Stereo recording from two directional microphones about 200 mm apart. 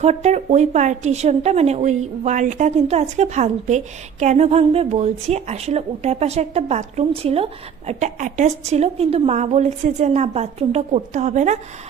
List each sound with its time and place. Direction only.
0.0 s a woman's voice: 35° right (ahead or behind)